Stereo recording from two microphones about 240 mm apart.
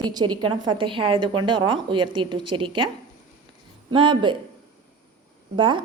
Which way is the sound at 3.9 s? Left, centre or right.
Centre.